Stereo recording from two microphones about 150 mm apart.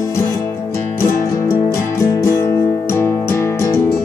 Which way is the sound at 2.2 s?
20° left (ahead or behind).